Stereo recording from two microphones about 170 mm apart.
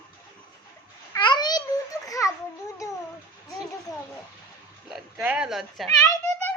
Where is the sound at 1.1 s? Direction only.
25° left (ahead or behind).